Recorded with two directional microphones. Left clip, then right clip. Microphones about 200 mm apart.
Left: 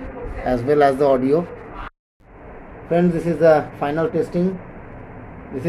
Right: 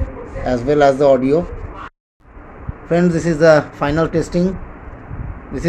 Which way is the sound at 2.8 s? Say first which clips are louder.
Right 3 dB; 35° right (ahead or behind).